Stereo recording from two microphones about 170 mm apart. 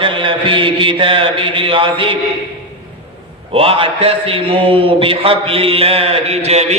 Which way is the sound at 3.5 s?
35° right (ahead or behind).